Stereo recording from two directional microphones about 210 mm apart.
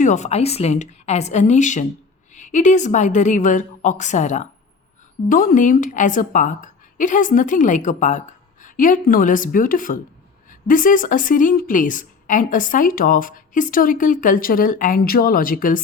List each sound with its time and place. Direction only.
0.0 s a woman's voice: 35° left (ahead or behind)